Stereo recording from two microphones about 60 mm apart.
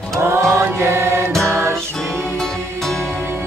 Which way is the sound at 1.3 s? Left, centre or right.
Centre.